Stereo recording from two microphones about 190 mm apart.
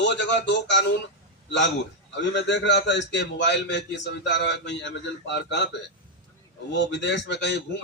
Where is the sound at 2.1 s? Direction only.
65° left (ahead or behind).